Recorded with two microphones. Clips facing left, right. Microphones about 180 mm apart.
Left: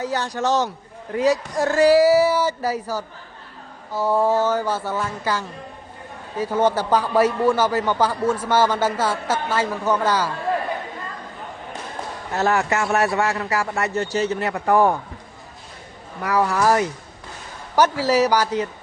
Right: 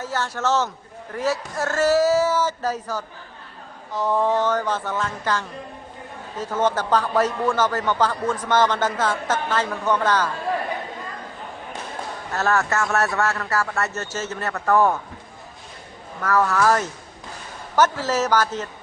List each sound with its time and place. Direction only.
0.0 s a man's voice: 15° left (ahead or behind)
12.3 s a man's voice: 15° left (ahead or behind)
16.2 s a man's voice: 15° left (ahead or behind)